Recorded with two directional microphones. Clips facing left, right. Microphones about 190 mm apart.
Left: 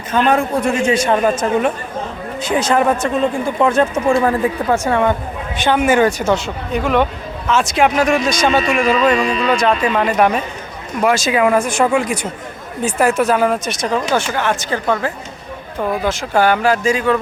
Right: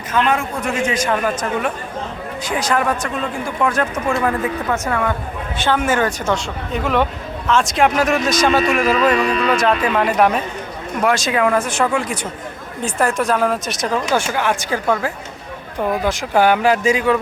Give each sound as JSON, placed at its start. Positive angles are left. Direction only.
{"t": 0.1, "sound": "a man's voice", "side_deg": 35}
{"t": 5.5, "sound": "speech", "side_deg": 15}